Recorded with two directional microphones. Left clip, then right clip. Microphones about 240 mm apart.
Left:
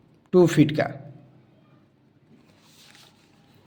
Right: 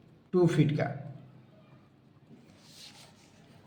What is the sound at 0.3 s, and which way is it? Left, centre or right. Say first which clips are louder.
Speech: left 9 dB; left.